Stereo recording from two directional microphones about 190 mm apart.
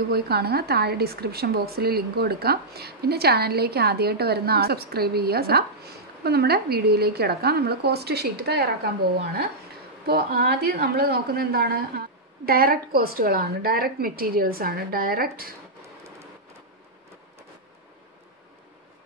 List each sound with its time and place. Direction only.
0.1 s a woman's voice: 55° right (ahead or behind)